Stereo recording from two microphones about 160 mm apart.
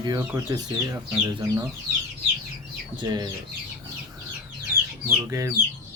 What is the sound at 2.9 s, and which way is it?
Speech, 25° right (ahead or behind).